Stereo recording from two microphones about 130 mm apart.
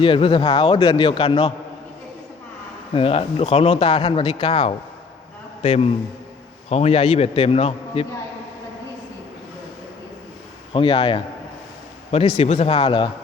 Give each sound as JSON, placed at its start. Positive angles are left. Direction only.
{"t": 0.0, "sound": "speech", "side_deg": 40}
{"t": 0.6, "sound": "speech", "side_deg": 50}
{"t": 2.9, "sound": "speech", "side_deg": 45}
{"t": 10.8, "sound": "speech", "side_deg": 40}
{"t": 12.4, "sound": "speech", "side_deg": 50}
{"t": 12.7, "sound": "speech", "side_deg": 40}